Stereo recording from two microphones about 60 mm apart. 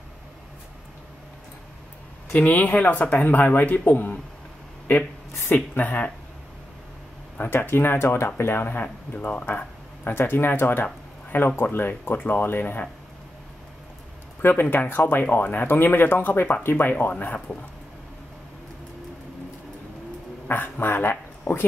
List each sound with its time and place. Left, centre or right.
2.3 s speech: left
5.5 s speech: left
7.3 s speech: left
14.4 s speech: left
20.4 s a sound: left